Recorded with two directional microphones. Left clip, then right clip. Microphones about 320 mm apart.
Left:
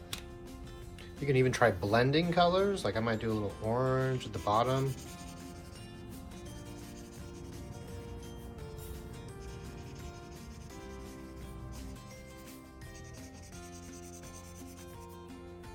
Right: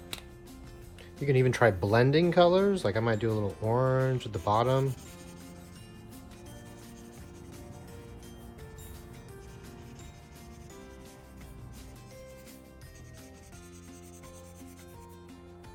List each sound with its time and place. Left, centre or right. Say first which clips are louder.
1.3 s speech: right 3 dB; right